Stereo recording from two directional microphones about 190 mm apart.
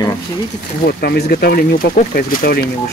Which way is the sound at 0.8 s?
55° left (ahead or behind).